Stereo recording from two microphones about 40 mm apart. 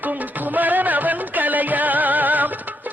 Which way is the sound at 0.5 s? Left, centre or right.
Right.